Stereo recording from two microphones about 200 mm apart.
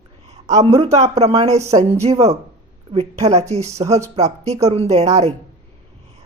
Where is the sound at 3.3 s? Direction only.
30° right (ahead or behind).